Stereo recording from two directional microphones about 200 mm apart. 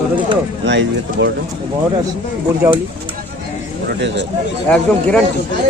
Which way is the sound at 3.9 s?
60° right (ahead or behind).